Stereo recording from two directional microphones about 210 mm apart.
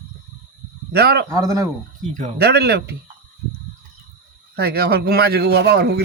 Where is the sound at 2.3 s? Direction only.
50° right (ahead or behind).